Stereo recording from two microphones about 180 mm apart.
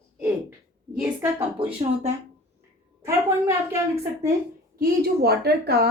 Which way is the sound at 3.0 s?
15° right (ahead or behind).